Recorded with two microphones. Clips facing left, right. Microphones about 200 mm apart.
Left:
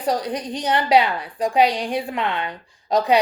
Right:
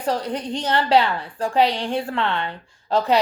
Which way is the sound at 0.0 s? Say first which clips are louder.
Left 1 dB; 15° left (ahead or behind).